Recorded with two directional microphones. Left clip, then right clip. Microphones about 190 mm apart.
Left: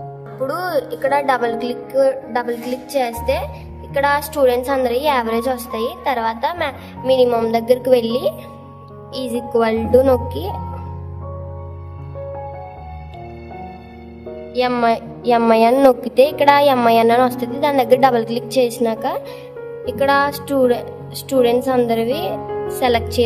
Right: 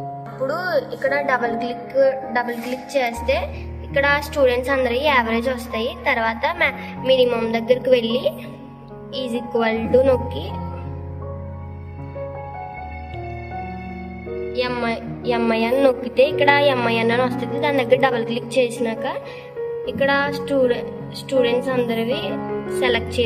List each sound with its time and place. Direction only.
0.5 s a woman's voice: 50° left (ahead or behind)
9.6 s a woman's voice: 45° left (ahead or behind)
14.5 s a woman's voice: 55° left (ahead or behind)